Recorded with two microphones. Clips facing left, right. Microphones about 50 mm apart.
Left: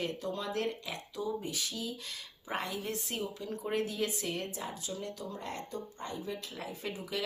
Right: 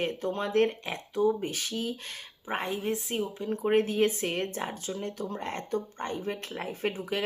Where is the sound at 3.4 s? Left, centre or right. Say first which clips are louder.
Right 10 dB; right.